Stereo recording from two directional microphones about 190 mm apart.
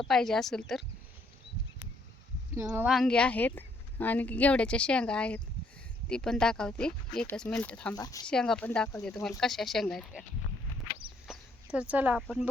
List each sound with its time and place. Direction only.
0.1 s speech: centre (ahead or behind)
2.6 s speech: 15° right (ahead or behind)
2.8 s speech: centre (ahead or behind)
8.0 s speech: 20° left (ahead or behind)
8.3 s speech: 5° left (ahead or behind)
11.3 s speech: 5° right (ahead or behind)